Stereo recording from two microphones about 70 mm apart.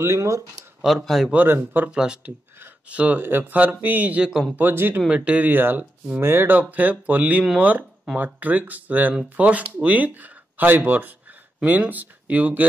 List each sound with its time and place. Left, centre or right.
0.0 s speech: right
0.8 s speech: centre
1.3 s speech: right
1.9 s speech: centre
4.3 s speech: centre
4.6 s speech: right
5.0 s speech: centre